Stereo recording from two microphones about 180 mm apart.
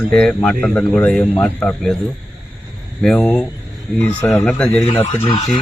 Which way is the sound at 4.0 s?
15° left (ahead or behind).